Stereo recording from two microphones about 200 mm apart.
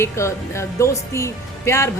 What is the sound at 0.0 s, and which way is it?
Speech, 15° left (ahead or behind).